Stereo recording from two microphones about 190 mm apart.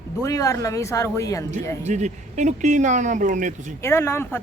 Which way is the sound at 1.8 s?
40° right (ahead or behind).